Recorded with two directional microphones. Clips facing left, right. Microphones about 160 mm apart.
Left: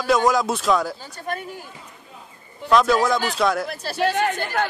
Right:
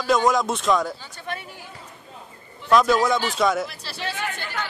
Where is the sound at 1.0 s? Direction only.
45° left (ahead or behind).